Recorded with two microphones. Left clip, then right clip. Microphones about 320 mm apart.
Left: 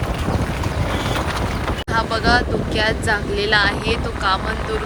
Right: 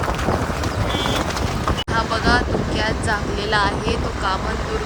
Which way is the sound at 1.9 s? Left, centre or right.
Centre.